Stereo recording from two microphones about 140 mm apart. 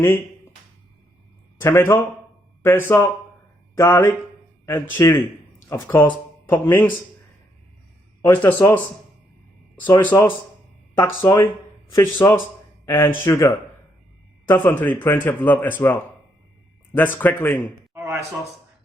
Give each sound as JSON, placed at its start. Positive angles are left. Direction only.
{"t": 1.5, "sound": "speech", "side_deg": 15}
{"t": 8.3, "sound": "speech", "side_deg": 15}
{"t": 9.8, "sound": "speech", "side_deg": 15}
{"t": 12.8, "sound": "a sound", "side_deg": 20}
{"t": 13.2, "sound": "speech", "side_deg": 20}
{"t": 17.9, "sound": "a sound", "side_deg": -20}